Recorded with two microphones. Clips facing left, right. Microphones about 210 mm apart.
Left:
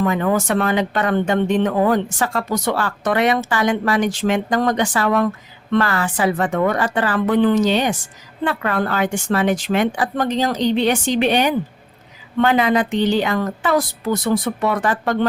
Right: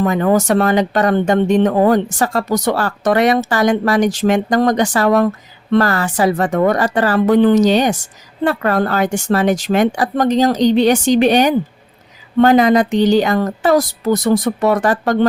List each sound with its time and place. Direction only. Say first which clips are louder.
0.0 s speech: right 4 dB; 40° right (ahead or behind)